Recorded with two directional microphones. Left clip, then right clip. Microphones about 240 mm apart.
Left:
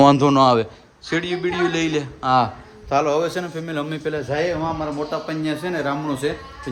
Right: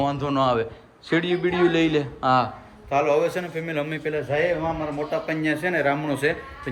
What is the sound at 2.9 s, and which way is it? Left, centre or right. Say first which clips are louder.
Speech: left 1 dB; left.